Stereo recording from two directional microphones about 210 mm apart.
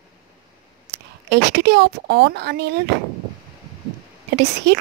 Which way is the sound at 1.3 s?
50° right (ahead or behind).